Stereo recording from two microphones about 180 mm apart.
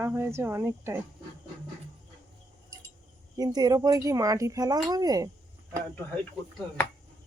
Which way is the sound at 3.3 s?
20° right (ahead or behind).